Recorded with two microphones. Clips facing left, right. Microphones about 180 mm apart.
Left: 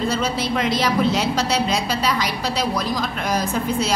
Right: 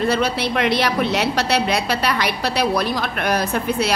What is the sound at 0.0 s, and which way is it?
A woman's voice, 65° right (ahead or behind).